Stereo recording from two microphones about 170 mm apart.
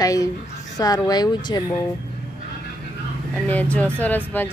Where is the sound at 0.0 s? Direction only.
20° left (ahead or behind).